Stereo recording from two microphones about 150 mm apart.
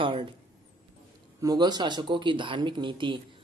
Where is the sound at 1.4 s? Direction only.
30° right (ahead or behind).